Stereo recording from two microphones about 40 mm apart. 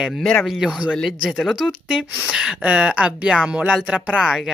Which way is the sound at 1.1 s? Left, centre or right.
Centre.